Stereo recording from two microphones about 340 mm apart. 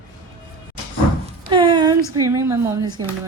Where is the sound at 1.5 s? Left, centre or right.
Centre.